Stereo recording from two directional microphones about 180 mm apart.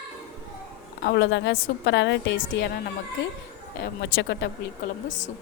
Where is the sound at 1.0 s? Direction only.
80° left.